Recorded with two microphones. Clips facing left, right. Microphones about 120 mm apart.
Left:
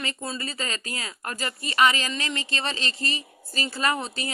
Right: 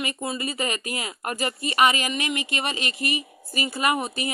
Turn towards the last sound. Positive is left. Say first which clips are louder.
# right 3 dB
turn(degrees=-15)  # may be behind; listen again after turning